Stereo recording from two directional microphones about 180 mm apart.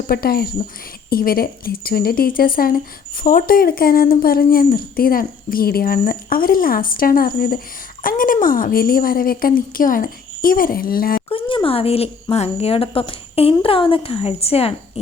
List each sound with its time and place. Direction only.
0.1 s speech: 55° left (ahead or behind)
11.3 s a woman's voice: 30° left (ahead or behind)